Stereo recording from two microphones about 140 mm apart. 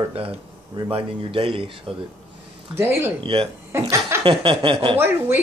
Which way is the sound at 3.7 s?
20° right (ahead or behind).